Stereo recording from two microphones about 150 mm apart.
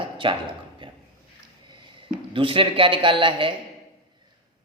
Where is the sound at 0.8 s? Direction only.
30° right (ahead or behind).